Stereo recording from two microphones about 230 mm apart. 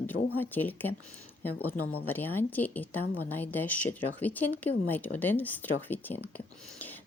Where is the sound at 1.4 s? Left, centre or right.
Left.